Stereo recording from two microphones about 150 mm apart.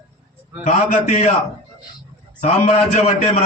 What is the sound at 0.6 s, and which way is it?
Speech, 55° left (ahead or behind).